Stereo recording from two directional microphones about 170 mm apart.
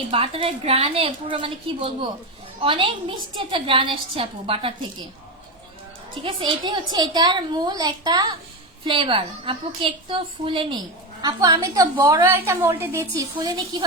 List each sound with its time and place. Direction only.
0.1 s a woman's voice: 35° right (ahead or behind)
6.2 s a woman's voice: 30° right (ahead or behind)